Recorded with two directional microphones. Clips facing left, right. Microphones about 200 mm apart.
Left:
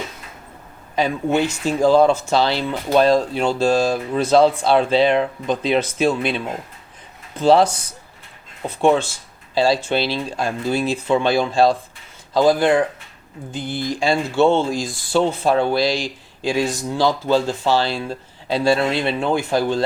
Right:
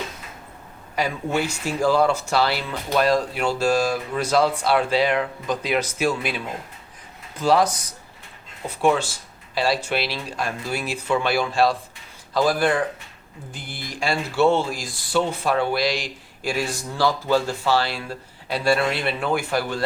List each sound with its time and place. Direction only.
0.9 s speech: 20° left (ahead or behind)
8.8 s speech: 25° left (ahead or behind)
14.0 s speech: 25° left (ahead or behind)